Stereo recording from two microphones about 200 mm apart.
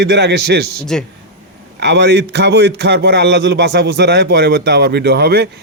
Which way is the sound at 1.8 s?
60° right (ahead or behind).